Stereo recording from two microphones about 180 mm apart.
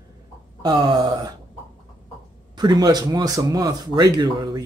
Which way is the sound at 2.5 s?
20° right (ahead or behind).